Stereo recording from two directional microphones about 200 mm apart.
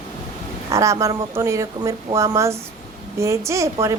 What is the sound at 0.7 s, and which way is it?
Speech, 15° right (ahead or behind).